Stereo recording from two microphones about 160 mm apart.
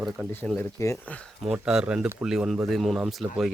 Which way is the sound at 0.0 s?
Centre (ahead or behind).